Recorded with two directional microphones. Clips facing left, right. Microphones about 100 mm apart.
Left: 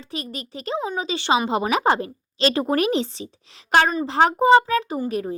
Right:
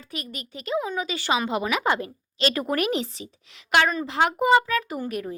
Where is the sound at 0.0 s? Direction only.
30° left (ahead or behind).